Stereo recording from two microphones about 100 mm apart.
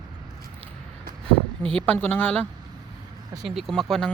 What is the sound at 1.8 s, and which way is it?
Speech, 15° left (ahead or behind).